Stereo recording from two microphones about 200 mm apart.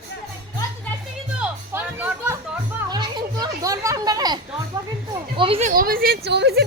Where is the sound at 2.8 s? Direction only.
20° right (ahead or behind); by 6.6 s 55° right (ahead or behind).